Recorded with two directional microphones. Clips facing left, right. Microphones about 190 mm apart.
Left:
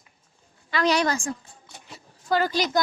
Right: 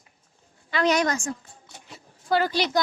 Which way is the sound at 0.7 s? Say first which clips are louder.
Even; 35° left (ahead or behind).